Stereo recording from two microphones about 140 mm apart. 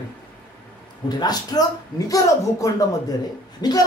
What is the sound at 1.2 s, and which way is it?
Speech, 30° left (ahead or behind).